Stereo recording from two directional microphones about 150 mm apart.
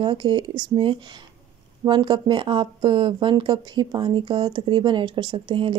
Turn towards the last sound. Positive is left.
turn(degrees=-30)  # may be behind; listen again after turning